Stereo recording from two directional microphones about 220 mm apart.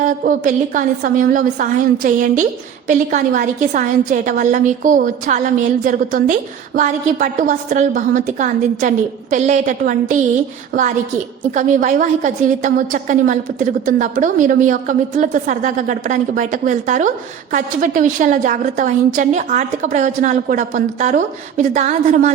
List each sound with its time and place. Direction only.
0.0 s a woman's voice: 35° right (ahead or behind)
11.5 s a woman's voice: 35° right (ahead or behind)